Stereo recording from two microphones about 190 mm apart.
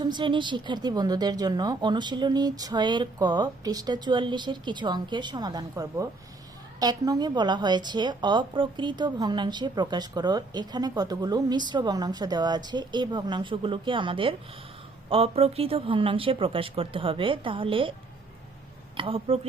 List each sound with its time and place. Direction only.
0.0 s speech: 25° right (ahead or behind)
18.9 s speech: 30° right (ahead or behind)